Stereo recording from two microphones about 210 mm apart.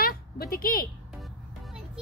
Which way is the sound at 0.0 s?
45° left (ahead or behind).